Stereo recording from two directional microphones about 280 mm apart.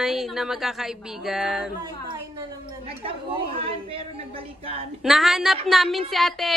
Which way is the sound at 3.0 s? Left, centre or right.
Centre.